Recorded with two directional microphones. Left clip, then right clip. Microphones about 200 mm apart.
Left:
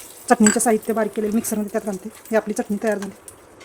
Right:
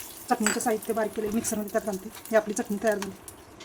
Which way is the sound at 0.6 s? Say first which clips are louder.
Left 7 dB; 40° left (ahead or behind).